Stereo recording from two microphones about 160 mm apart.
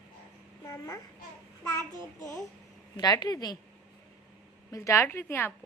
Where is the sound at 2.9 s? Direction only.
25° left (ahead or behind).